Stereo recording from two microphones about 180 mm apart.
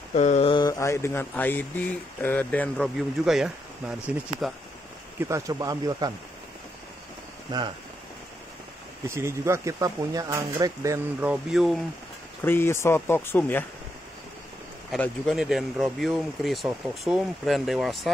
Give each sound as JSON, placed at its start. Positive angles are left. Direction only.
{"t": 0.1, "sound": "speech", "side_deg": 40}
{"t": 3.3, "sound": "speech", "side_deg": -5}
{"t": 5.3, "sound": "speech", "side_deg": -20}
{"t": 7.5, "sound": "speech", "side_deg": -20}
{"t": 9.1, "sound": "speech", "side_deg": -15}
{"t": 12.4, "sound": "speech", "side_deg": 10}
{"t": 14.9, "sound": "speech", "side_deg": 0}